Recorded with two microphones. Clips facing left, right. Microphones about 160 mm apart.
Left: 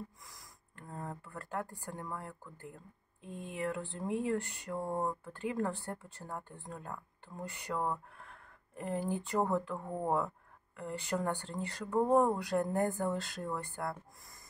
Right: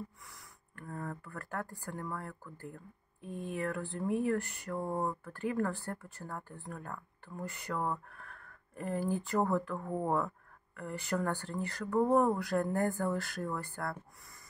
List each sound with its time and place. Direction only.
0.7 s speech: 20° left (ahead or behind)